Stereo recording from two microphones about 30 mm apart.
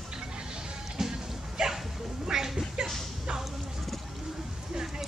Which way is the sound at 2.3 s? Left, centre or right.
Centre.